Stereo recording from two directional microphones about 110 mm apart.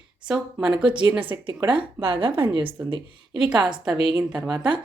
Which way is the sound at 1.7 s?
55° right (ahead or behind).